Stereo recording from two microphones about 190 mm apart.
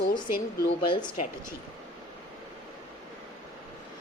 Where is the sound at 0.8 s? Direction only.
25° left (ahead or behind).